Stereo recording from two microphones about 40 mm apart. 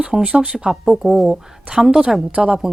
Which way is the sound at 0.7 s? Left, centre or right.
Centre.